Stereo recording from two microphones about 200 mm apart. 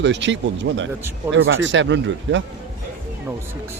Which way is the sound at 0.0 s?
65° right (ahead or behind).